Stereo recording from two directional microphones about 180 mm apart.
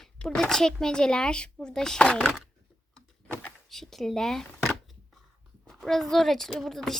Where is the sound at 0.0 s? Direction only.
5° left (ahead or behind).